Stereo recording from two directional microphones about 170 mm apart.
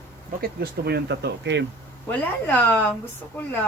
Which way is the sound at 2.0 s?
10° left (ahead or behind).